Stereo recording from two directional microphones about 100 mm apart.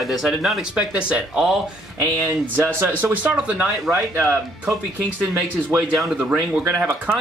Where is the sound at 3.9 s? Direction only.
25° right (ahead or behind).